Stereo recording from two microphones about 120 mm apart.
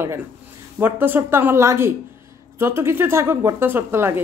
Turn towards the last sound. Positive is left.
turn(degrees=-20)  # may be behind; listen again after turning